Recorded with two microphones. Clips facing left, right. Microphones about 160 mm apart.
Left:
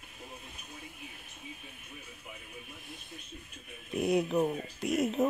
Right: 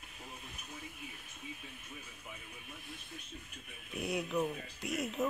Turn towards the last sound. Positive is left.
turn(degrees=45)  # may be behind; listen again after turning